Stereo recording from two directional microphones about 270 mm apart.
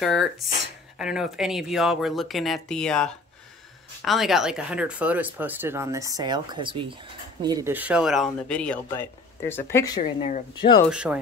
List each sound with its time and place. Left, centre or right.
0.0 s speech: centre
10.9 s speech: centre